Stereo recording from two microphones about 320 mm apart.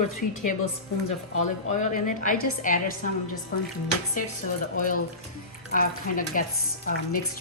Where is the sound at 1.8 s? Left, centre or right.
Left.